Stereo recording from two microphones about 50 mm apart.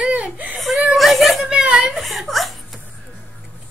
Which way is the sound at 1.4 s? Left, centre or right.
Centre.